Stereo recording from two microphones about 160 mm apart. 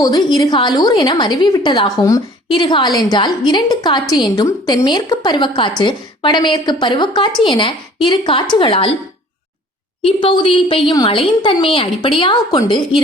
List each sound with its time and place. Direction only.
0.0 s a woman's voice: 25° left (ahead or behind)
10.0 s a woman's voice: 35° left (ahead or behind)